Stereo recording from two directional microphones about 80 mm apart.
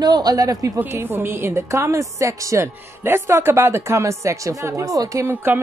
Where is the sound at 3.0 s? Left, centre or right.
Right.